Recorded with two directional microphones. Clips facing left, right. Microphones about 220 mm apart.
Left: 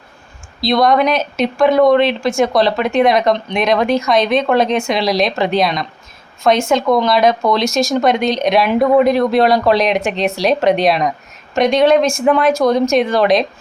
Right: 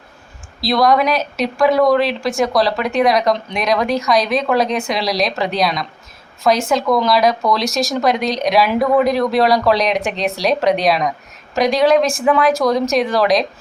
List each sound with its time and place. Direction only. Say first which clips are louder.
0.6 s speech: left 2 dB; centre (ahead or behind)